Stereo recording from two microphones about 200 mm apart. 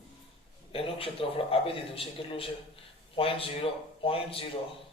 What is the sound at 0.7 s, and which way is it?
A man's voice, 25° left (ahead or behind).